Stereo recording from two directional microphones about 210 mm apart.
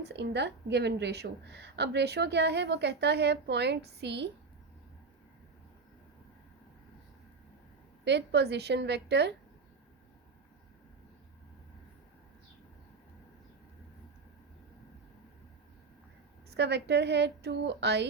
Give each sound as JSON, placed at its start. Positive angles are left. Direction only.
{"t": 0.0, "sound": "a woman's voice", "side_deg": -55}
{"t": 8.0, "sound": "a woman's voice", "side_deg": -55}
{"t": 16.5, "sound": "a woman's voice", "side_deg": -55}